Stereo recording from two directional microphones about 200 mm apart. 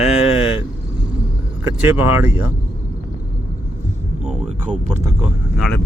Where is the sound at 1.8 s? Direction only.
10° right (ahead or behind).